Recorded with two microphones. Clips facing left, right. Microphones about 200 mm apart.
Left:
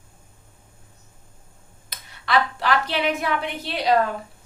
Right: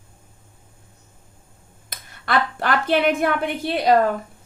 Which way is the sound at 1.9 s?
50° right (ahead or behind).